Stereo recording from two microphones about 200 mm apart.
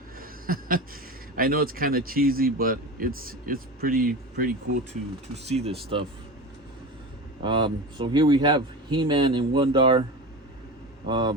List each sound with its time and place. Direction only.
0.2 s a sound: 45° right (ahead or behind)
1.4 s speech: 45° right (ahead or behind)
5.3 s speech: 30° right (ahead or behind)
7.4 s speech: 25° right (ahead or behind)
11.0 s speech: 20° right (ahead or behind)